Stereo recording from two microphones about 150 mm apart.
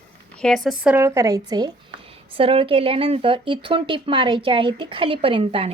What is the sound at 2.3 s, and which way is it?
Speech, 35° right (ahead or behind).